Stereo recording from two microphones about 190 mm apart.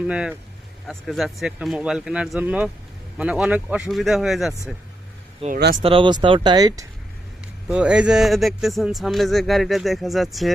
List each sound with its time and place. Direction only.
0.1 s speech: 5° right (ahead or behind)
5.8 s speech: 25° right (ahead or behind)
7.7 s speech: 5° right (ahead or behind)